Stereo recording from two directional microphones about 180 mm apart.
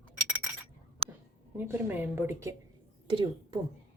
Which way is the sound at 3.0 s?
25° right (ahead or behind).